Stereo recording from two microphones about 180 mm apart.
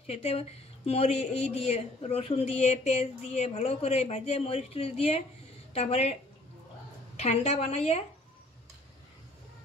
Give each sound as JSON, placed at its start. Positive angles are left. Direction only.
{"t": 0.0, "sound": "a woman's voice", "side_deg": 35}
{"t": 7.2, "sound": "speech", "side_deg": 35}